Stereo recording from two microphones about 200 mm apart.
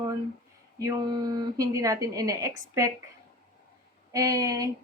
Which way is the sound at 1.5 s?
15° right (ahead or behind).